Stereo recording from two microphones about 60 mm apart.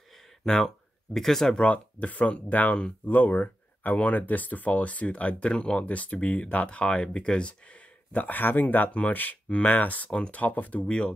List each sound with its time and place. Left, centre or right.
1.1 s speech: centre
1.6 s speech: left
8.1 s speech: left
10.9 s speech: centre